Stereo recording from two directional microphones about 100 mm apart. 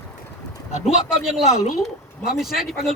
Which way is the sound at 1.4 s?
90° left.